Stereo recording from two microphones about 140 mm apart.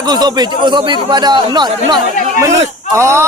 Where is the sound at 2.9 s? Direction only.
20° right (ahead or behind).